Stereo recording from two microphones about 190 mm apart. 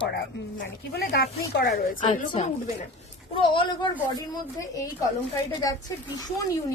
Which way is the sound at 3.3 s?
25° left (ahead or behind).